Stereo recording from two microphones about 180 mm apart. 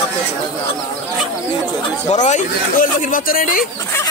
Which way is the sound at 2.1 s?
40° left (ahead or behind).